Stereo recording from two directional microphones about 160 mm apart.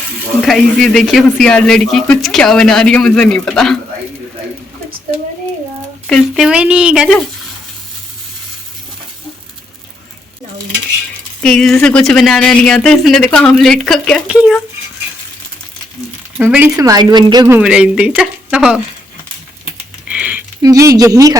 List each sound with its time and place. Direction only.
0.4 s speech: centre (ahead or behind)
6.1 s speech: centre (ahead or behind)
11.3 s speech: 5° left (ahead or behind)
16.4 s speech: 10° right (ahead or behind)
16.7 s a woman's voice: 25° right (ahead or behind)
17.6 s speech: 5° right (ahead or behind)
20.1 s typing: 10° right (ahead or behind)
20.6 s a woman's voice: 20° right (ahead or behind)